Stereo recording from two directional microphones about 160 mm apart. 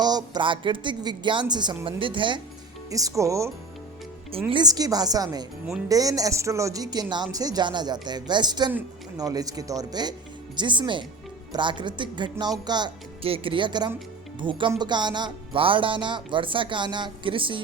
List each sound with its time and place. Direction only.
0.0 s speech: 25° right (ahead or behind)
2.9 s speech: 20° right (ahead or behind)
4.3 s speech: 35° right (ahead or behind)